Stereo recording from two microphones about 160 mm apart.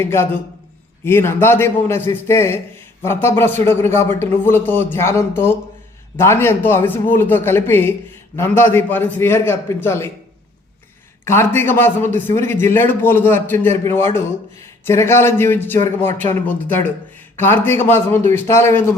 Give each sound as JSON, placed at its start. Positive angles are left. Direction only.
{"t": 0.0, "sound": "a man's voice", "side_deg": 15}
{"t": 11.3, "sound": "a man's voice", "side_deg": 15}